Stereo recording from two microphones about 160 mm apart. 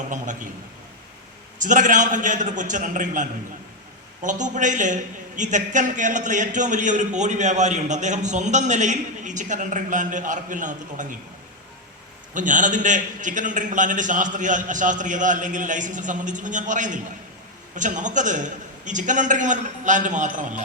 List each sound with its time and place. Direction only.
1.6 s a man's voice: 55° right (ahead or behind)
12.3 s a man's voice: 55° right (ahead or behind)